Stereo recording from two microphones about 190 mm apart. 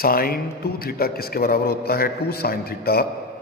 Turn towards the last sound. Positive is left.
turn(degrees=55)  # may be behind; listen again after turning